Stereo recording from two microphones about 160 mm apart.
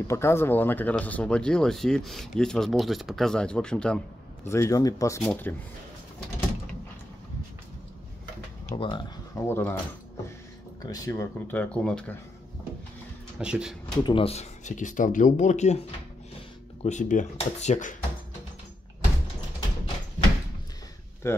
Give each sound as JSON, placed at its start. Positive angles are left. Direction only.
{"t": 0.1, "sound": "speech", "side_deg": 15}
{"t": 4.5, "sound": "speech", "side_deg": 20}
{"t": 5.2, "sound": "speech", "side_deg": 5}
{"t": 8.7, "sound": "speech", "side_deg": 30}
{"t": 9.3, "sound": "speech", "side_deg": 15}
{"t": 10.8, "sound": "speech", "side_deg": 20}
{"t": 13.4, "sound": "speech", "side_deg": -5}
{"t": 13.9, "sound": "speech", "side_deg": 30}
{"t": 16.8, "sound": "speech", "side_deg": 50}
{"t": 21.2, "sound": "speech", "side_deg": 15}